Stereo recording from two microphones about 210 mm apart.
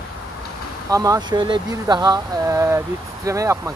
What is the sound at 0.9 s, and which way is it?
Speech, 15° right (ahead or behind).